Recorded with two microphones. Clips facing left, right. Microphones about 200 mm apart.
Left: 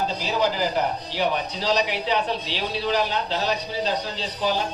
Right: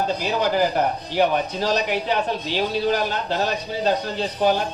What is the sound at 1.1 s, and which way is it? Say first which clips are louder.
Speech: right 7 dB; 50° right (ahead or behind).